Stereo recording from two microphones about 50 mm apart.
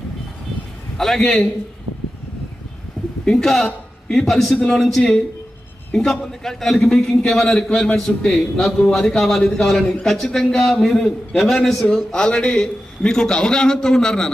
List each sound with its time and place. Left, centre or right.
0.9 s a man's voice: centre
3.3 s a man's voice: centre
12.1 s a man's voice: centre